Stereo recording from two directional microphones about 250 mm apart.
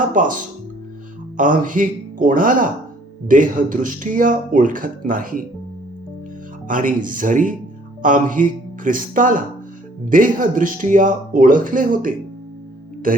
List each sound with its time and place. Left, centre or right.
0.1 s speech: right
6.7 s speech: right